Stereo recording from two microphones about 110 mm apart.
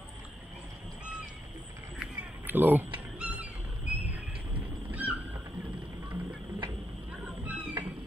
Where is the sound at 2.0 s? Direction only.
15° right (ahead or behind).